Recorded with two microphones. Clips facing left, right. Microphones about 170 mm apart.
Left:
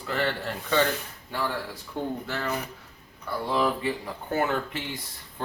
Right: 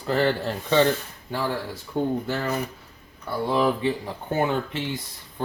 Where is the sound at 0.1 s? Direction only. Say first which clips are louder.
Right 6 dB; 35° right (ahead or behind).